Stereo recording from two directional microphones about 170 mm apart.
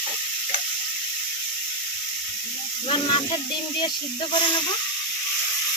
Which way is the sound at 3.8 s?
25° left (ahead or behind).